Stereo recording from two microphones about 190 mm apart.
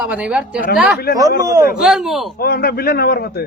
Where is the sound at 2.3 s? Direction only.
55° left (ahead or behind).